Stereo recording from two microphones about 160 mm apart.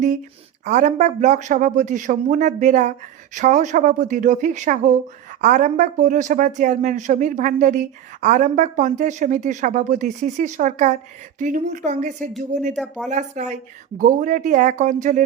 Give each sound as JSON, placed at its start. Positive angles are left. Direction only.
{"t": 0.6, "sound": "speech", "side_deg": -50}
{"t": 12.7, "sound": "speech", "side_deg": 0}
{"t": 13.1, "sound": "speech", "side_deg": -50}